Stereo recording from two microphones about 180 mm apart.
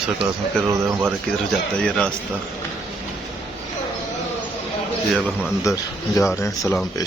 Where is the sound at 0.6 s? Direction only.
10° right (ahead or behind).